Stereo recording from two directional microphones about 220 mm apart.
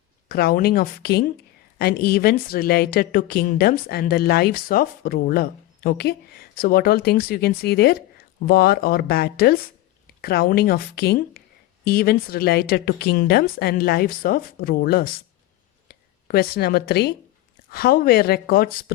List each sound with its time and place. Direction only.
0.3 s a woman's voice: 45° left (ahead or behind)